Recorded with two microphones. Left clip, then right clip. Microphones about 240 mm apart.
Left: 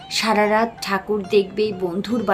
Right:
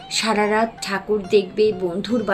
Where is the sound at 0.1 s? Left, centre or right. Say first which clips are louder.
Left 2 dB; centre.